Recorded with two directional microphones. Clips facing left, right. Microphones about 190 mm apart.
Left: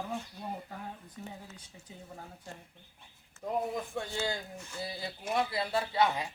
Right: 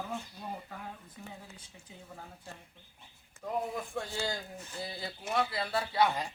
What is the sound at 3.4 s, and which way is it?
A man's voice, 20° left (ahead or behind).